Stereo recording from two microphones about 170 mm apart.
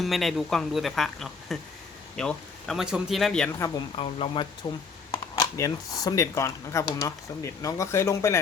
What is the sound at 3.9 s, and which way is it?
Speech, 35° left (ahead or behind).